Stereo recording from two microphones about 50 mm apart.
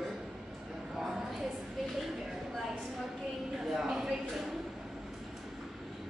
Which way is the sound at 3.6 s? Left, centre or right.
Centre.